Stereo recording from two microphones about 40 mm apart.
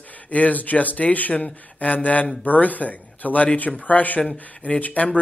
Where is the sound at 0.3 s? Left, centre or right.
Left.